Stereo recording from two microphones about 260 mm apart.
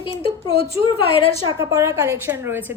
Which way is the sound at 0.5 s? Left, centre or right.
Left.